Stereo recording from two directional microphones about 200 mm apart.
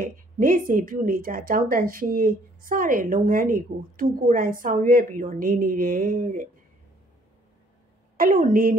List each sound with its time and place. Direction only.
0.0 s a woman's voice: 45° right (ahead or behind)
8.2 s a woman's voice: 45° right (ahead or behind)